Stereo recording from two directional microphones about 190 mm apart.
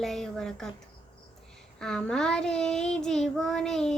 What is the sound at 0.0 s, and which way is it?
Child singing, centre (ahead or behind).